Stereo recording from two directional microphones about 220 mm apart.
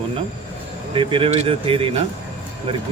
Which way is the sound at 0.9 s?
25° right (ahead or behind).